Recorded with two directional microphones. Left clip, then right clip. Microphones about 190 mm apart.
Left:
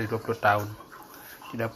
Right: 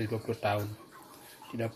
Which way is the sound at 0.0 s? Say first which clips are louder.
Left 7 dB; 15° right (ahead or behind).